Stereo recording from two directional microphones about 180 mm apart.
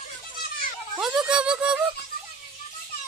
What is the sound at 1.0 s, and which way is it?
Speech, 5° right (ahead or behind).